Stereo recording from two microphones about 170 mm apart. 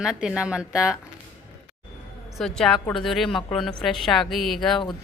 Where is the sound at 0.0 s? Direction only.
5° right (ahead or behind).